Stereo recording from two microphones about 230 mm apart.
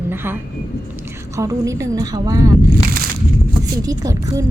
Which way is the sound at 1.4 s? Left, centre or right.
Centre.